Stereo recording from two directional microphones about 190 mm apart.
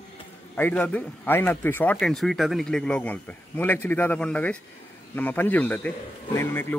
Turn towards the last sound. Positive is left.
turn(degrees=10)  # may be behind; listen again after turning